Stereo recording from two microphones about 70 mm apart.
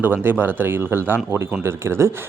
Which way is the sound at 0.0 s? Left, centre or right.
Right.